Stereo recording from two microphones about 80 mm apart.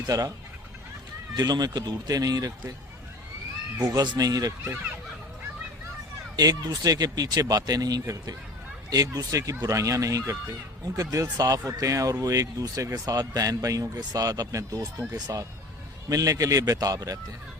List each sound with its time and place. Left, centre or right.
0.1 s speech: right
1.4 s speech: right
3.8 s speech: right
4.6 s speech: right
6.3 s speech: right